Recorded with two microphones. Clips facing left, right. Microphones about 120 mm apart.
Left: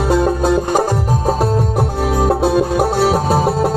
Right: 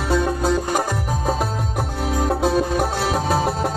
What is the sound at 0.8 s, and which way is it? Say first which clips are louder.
Music: left 7 dB; 30° left (ahead or behind).